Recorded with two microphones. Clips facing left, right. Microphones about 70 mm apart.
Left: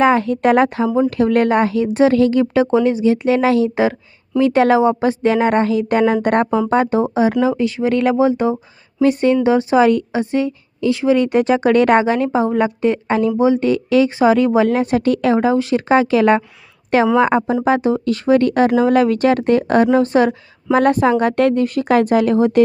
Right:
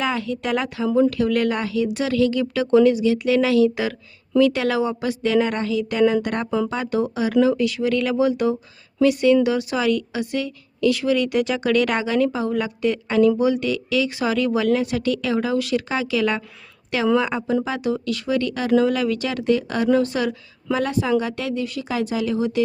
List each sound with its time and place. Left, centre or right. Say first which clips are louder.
0.0 s a woman's voice: left 10 dB; left